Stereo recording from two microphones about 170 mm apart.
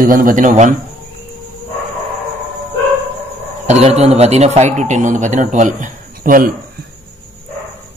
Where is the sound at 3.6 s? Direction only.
40° right (ahead or behind).